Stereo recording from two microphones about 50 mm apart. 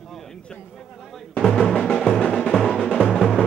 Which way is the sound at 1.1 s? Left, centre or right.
Centre.